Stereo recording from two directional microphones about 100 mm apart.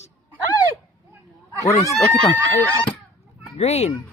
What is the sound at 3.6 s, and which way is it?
Speech, 90° left.